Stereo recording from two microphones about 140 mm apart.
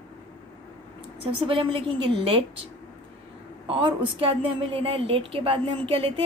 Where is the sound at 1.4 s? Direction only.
40° right (ahead or behind).